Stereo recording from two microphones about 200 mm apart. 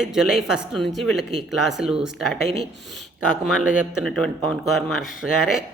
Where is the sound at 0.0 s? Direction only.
Centre (ahead or behind).